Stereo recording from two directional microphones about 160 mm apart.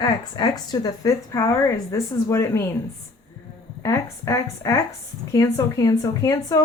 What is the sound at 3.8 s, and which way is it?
A woman's voice, 20° left (ahead or behind).